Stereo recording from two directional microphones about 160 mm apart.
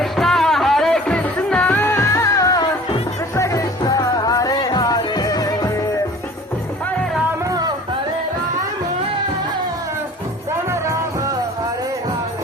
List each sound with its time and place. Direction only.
0.0 s music: centre (ahead or behind); by 5.8 s 20° left (ahead or behind)
10.7 s music: 20° right (ahead or behind)